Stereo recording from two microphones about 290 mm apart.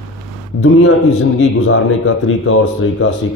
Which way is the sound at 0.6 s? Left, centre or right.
Left.